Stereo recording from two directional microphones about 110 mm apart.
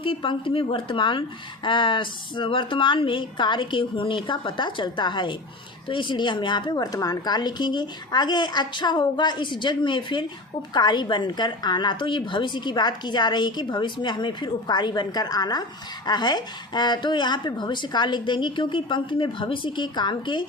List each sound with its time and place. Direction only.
0.0 s a woman's voice: 55° left (ahead or behind)